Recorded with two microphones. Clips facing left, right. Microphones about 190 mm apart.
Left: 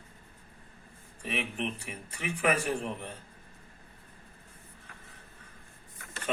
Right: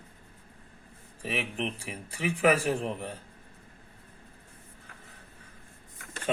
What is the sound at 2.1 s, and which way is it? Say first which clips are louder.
Speech: right 4 dB; 35° right (ahead or behind).